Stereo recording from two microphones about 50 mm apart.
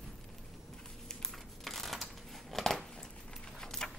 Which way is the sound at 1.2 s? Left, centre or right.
Centre.